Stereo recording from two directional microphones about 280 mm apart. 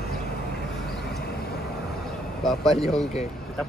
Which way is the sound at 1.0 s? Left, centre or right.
Left.